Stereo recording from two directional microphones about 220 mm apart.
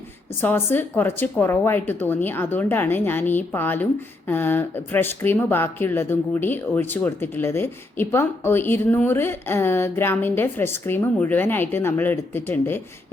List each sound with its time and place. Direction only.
0.4 s speech: 10° left (ahead or behind)